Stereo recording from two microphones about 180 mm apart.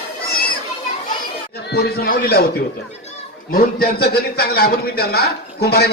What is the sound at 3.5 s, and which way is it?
A man's voice, 55° left (ahead or behind).